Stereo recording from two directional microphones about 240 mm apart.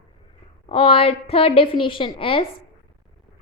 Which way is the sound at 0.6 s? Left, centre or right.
Left.